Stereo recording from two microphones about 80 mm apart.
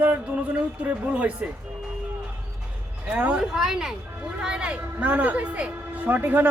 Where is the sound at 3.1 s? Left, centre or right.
Centre.